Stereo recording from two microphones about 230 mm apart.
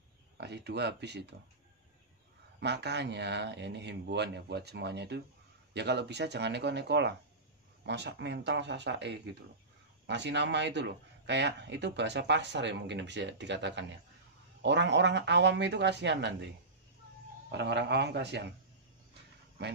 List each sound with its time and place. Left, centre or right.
0.4 s speech: right
2.6 s speech: right
17.5 s speech: right